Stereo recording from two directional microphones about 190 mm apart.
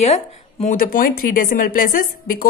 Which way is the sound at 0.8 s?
50° left (ahead or behind).